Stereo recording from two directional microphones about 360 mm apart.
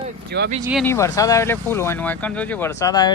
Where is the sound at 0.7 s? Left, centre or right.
Centre.